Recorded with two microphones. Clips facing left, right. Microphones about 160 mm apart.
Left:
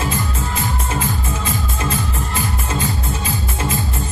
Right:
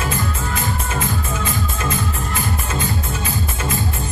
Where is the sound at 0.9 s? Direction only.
30° left (ahead or behind).